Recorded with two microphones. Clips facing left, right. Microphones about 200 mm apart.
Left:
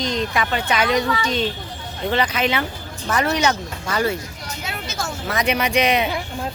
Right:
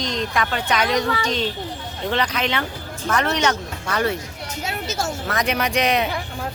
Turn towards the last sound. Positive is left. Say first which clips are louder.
# left 1 dB
turn(degrees=0)  # may be behind; listen again after turning